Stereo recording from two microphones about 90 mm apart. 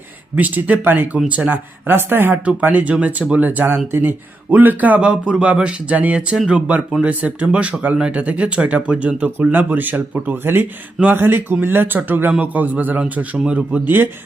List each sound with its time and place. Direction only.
0.3 s speech: 20° right (ahead or behind)